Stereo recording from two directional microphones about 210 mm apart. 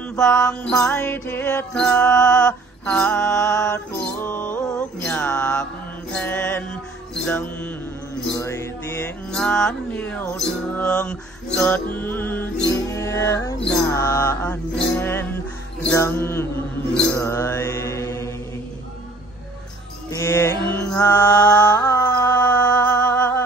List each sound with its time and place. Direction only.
0.2 s music: 15° left (ahead or behind)
0.5 s music: 5° left (ahead or behind)
2.9 s music: 5° left (ahead or behind)
4.3 s music: 35° left (ahead or behind)
4.6 s music: 10° left (ahead or behind)
16.9 s mantra: 15° left (ahead or behind)
20.1 s mantra: 15° left (ahead or behind)